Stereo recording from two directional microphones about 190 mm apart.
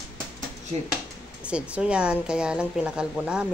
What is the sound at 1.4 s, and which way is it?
A woman's voice, 5° right (ahead or behind).